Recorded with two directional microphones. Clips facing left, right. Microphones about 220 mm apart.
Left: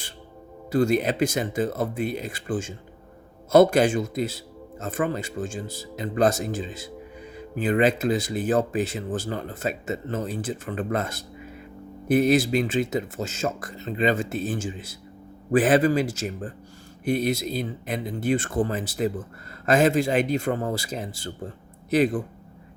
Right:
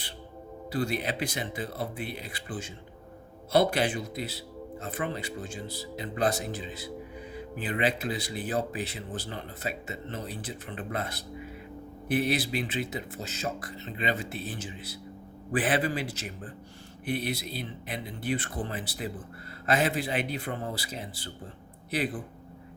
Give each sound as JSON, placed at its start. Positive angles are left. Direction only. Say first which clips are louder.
{"t": 0.7, "sound": "a man's voice", "louder": "left 9 dB", "side_deg": 45}